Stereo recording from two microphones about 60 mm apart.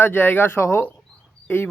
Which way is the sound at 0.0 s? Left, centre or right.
Left.